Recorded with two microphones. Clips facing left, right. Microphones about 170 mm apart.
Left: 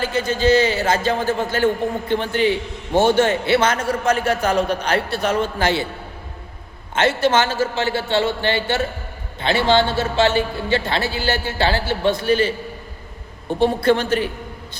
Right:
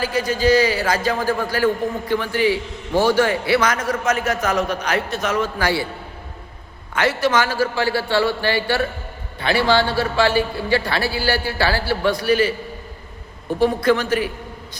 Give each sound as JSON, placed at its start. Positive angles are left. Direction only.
{"t": 0.0, "sound": "a man's voice", "side_deg": 25}
{"t": 6.9, "sound": "a man's voice", "side_deg": 25}